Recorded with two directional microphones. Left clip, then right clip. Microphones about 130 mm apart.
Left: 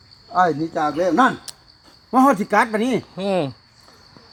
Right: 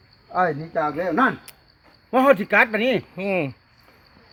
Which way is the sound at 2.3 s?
50° right (ahead or behind).